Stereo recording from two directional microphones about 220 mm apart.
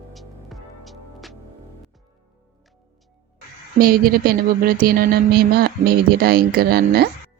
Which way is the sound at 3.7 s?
40° right (ahead or behind).